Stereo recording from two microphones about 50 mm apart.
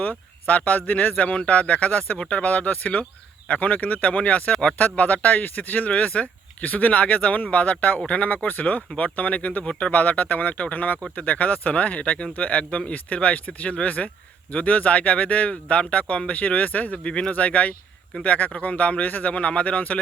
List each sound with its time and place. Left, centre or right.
0.0 s speech: left